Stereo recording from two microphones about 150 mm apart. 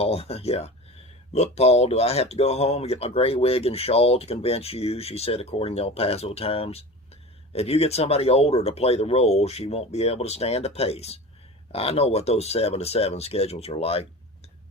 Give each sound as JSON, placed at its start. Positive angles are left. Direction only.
{"t": 0.0, "sound": "speech", "side_deg": 40}